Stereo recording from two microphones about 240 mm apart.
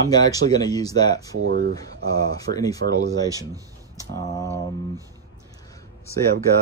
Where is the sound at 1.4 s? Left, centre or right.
Right.